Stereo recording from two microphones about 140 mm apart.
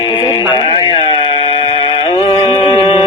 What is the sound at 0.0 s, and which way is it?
Radio, 35° left (ahead or behind).